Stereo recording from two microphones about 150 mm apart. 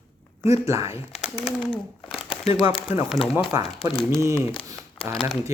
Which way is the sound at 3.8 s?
40° left (ahead or behind).